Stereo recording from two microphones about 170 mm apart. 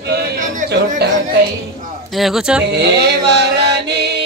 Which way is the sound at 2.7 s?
75° right (ahead or behind).